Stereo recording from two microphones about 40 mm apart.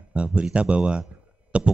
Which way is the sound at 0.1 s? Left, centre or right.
Right.